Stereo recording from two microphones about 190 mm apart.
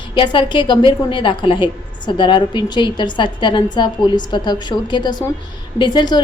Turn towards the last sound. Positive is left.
turn(degrees=25)  # may be behind; listen again after turning